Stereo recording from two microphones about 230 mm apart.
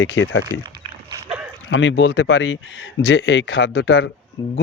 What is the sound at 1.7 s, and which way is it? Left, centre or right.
Speech, left.